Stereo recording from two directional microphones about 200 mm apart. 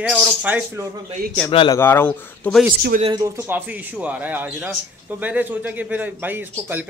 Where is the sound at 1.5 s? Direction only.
25° left (ahead or behind).